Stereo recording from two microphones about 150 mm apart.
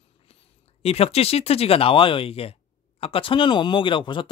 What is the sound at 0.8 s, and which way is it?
Speech, 40° left (ahead or behind).